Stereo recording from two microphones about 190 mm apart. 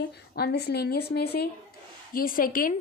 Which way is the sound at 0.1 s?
55° left (ahead or behind).